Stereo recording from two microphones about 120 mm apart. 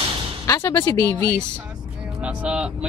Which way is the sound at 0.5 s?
30° left (ahead or behind).